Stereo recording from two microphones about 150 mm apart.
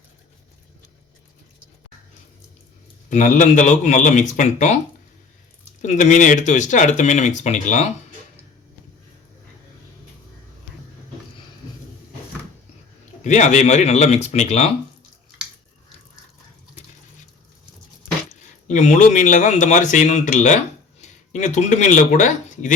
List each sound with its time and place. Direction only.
3.1 s speech: 55° left (ahead or behind)
5.8 s speech: 55° left (ahead or behind)
13.2 s speech: 50° left (ahead or behind)
18.3 s speech: 55° left (ahead or behind)